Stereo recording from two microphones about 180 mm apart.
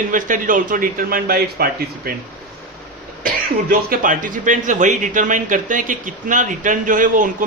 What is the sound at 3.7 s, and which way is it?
A man's voice, 50° right (ahead or behind).